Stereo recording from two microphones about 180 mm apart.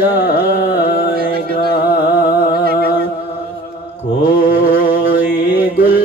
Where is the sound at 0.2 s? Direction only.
60° left (ahead or behind).